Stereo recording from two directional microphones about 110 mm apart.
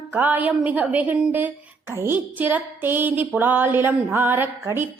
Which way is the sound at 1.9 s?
25° right (ahead or behind).